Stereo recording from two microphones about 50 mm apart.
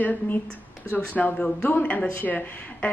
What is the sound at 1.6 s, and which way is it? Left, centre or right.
Speech, left.